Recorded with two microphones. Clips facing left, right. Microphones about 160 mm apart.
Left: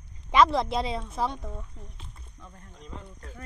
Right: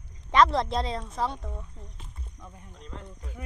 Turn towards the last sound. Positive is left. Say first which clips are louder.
# right 1 dB
turn(degrees=-10)  # may be behind; listen again after turning